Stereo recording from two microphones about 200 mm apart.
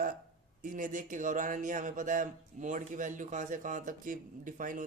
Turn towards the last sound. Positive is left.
turn(degrees=-40)  # may be behind; listen again after turning